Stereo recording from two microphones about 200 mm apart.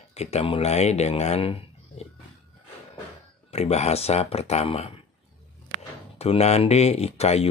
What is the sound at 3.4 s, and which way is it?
Speech, 30° left (ahead or behind).